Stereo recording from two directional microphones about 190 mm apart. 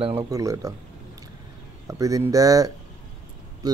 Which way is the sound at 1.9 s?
15° right (ahead or behind).